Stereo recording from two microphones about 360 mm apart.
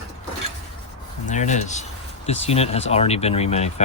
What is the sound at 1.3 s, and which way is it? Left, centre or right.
Speech, centre.